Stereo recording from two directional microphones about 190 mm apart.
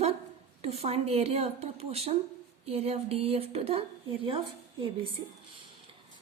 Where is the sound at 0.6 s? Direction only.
35° right (ahead or behind).